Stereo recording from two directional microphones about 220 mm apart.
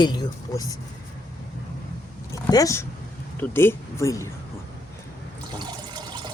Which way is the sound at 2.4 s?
15° left (ahead or behind).